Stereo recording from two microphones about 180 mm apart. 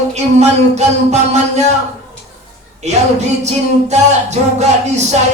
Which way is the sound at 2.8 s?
40° right (ahead or behind).